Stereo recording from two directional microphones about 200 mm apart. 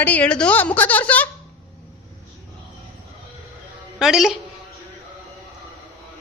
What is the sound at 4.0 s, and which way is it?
Speech, centre (ahead or behind).